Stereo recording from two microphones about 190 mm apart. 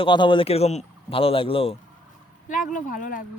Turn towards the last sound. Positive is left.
turn(degrees=45)  # may be behind; listen again after turning